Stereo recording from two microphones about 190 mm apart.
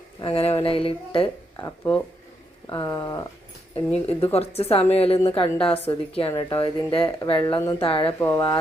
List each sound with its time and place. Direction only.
0.2 s speech: 30° left (ahead or behind)
1.5 s speech: 10° left (ahead or behind)
3.9 s a woman's voice: 30° left (ahead or behind)
8.2 s speech: 10° left (ahead or behind)